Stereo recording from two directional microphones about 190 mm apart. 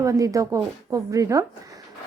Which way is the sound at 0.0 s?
15° right (ahead or behind).